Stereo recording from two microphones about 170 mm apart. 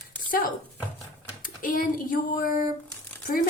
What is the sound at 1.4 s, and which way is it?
A woman's voice, 55° left (ahead or behind).